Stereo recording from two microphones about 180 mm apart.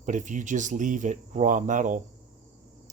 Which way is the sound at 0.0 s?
45° right (ahead or behind).